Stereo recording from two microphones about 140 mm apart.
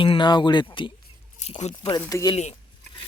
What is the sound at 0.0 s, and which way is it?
Speech, 35° left (ahead or behind).